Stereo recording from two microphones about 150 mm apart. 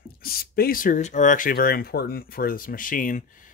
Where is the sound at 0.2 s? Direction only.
80° left.